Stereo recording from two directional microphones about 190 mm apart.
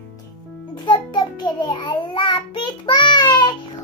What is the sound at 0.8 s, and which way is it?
Child singing, 25° left (ahead or behind).